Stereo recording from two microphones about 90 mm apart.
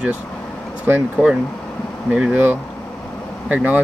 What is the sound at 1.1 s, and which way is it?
Speech, 10° right (ahead or behind).